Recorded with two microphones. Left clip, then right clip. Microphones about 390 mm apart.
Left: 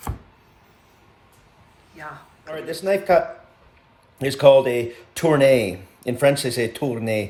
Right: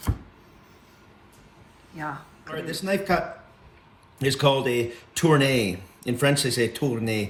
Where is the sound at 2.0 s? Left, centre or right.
Centre.